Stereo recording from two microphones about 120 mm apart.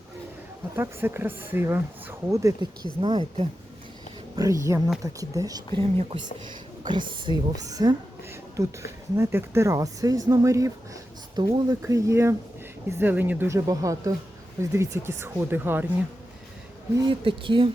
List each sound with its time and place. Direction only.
0.8 s speech: 20° right (ahead or behind)
3.0 s speech: 45° right (ahead or behind)
4.4 s speech: 25° right (ahead or behind)
5.8 s speech: 55° right (ahead or behind); by 13.5 s 15° right (ahead or behind)
13.5 s speech: 30° right (ahead or behind)
17.1 s speech: 45° right (ahead or behind)